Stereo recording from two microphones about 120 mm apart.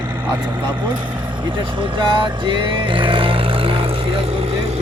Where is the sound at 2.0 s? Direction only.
40° right (ahead or behind).